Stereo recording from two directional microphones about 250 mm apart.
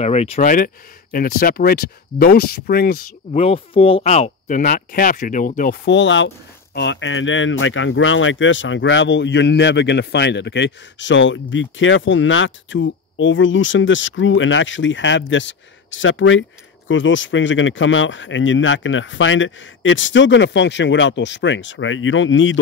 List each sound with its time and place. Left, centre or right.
0.0 s speech: left
3.3 s speech: left